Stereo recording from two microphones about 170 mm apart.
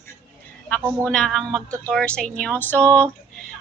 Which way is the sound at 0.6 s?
10° left (ahead or behind).